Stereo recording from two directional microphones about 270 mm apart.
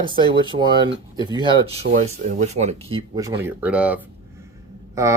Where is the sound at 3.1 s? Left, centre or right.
Centre.